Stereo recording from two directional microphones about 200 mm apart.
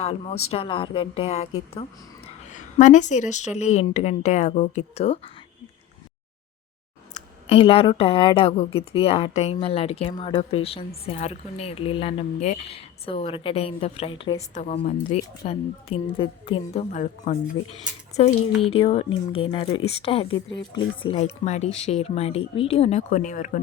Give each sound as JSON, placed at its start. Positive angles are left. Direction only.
{"t": 0.0, "sound": "a woman's voice", "side_deg": 30}
{"t": 7.1, "sound": "a woman's voice", "side_deg": 30}
{"t": 16.9, "sound": "a woman's voice", "side_deg": 35}